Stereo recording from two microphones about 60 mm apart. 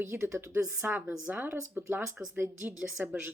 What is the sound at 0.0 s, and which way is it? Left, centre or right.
Speech, right.